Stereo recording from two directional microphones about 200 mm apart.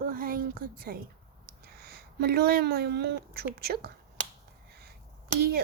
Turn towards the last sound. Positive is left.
turn(degrees=-55)  # may be behind; listen again after turning